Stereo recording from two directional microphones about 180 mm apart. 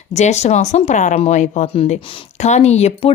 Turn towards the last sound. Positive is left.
turn(degrees=35)  # may be behind; listen again after turning